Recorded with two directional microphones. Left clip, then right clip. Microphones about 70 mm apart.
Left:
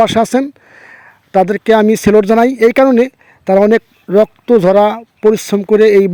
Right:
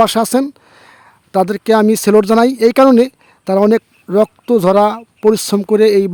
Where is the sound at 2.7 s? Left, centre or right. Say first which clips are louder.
Even; right.